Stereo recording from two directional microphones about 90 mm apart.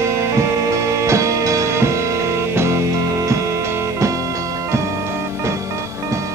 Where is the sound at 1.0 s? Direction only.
35° right (ahead or behind).